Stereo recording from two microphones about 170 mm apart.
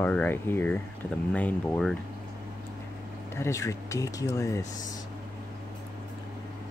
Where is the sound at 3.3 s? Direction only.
15° left (ahead or behind).